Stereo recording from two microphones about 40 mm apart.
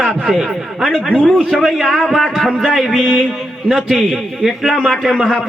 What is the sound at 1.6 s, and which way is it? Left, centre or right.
A man's voice, centre.